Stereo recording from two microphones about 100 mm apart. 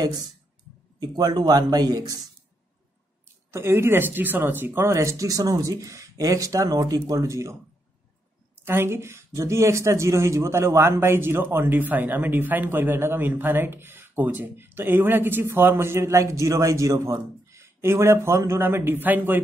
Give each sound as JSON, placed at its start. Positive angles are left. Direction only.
{"t": 0.9, "sound": "speech", "side_deg": -40}
{"t": 3.5, "sound": "speech", "side_deg": -25}
{"t": 8.6, "sound": "speech", "side_deg": -25}